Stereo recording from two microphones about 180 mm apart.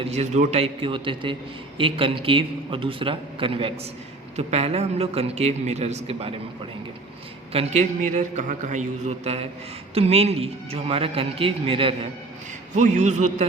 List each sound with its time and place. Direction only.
0.0 s a man's voice: 35° right (ahead or behind)
7.5 s speech: 35° right (ahead or behind)
12.7 s speech: 40° right (ahead or behind)